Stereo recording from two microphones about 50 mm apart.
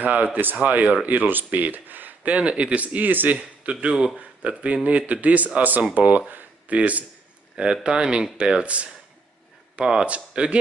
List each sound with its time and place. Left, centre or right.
0.0 s speech: right
2.3 s speech: right
3.8 s speech: right
7.5 s speech: centre